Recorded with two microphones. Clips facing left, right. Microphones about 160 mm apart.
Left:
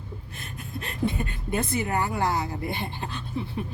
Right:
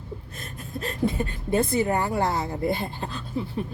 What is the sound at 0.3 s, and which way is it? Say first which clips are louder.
Speech: right 1 dB; 40° right (ahead or behind).